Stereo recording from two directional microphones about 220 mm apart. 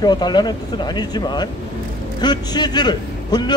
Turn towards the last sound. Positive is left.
turn(degrees=20)  # may be behind; listen again after turning